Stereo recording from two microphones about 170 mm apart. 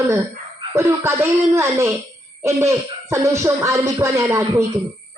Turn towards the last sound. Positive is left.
turn(degrees=-20)  # may be behind; listen again after turning